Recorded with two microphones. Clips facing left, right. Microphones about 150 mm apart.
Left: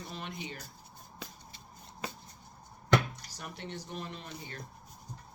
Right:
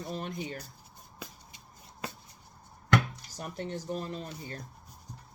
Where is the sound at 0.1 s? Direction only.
45° right (ahead or behind).